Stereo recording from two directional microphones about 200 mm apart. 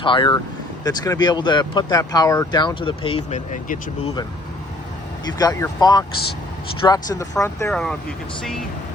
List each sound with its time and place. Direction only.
0.0 s speech: 25° left (ahead or behind)
5.4 s speech: 15° left (ahead or behind)
7.7 s speech: centre (ahead or behind)